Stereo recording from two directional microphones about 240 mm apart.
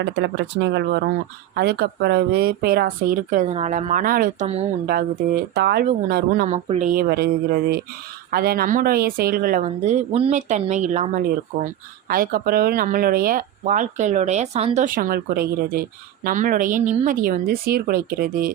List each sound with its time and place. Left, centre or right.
0.0 s speech: right
5.5 s speech: right
6.5 s speech: right